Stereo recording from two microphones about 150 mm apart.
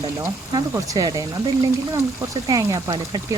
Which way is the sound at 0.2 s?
20° right (ahead or behind).